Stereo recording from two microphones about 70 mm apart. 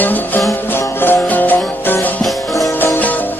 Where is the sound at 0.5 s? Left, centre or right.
Left.